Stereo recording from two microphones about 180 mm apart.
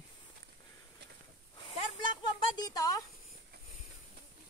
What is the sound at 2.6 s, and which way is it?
Speech, 20° left (ahead or behind).